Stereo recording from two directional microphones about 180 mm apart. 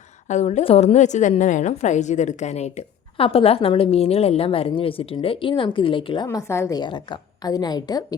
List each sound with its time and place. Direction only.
0.3 s a woman's voice: 40° left (ahead or behind)
6.2 s a woman's voice: 15° left (ahead or behind)